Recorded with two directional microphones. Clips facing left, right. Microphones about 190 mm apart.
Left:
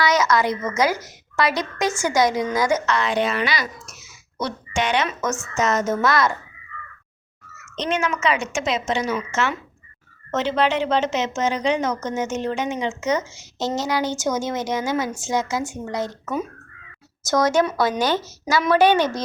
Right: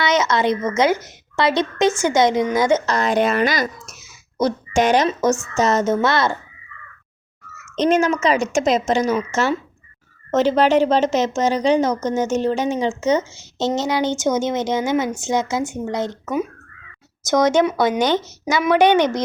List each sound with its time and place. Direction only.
0.0 s a woman's voice: 25° right (ahead or behind)
2.8 s speech: 40° right (ahead or behind)
5.5 s a woman's voice: 30° right (ahead or behind)
7.8 s a woman's voice: 40° right (ahead or behind); by 19.2 s 15° right (ahead or behind)